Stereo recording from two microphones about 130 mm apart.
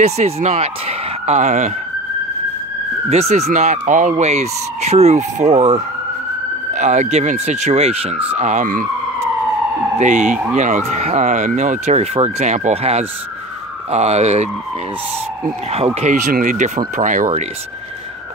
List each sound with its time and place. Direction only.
0.0 s speech: 60° right (ahead or behind)
3.1 s speech: 55° right (ahead or behind); by 8.8 s 80° right
9.9 s speech: 70° right (ahead or behind)
15.7 s speech: 55° right (ahead or behind); by 17.3 s 75° right (ahead or behind)